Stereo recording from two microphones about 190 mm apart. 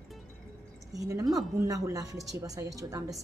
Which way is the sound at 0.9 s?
20° right (ahead or behind).